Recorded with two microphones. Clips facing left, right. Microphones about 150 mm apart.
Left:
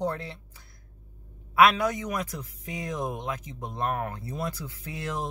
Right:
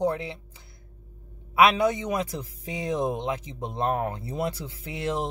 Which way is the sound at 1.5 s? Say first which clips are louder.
Right 1 dB; 25° right (ahead or behind).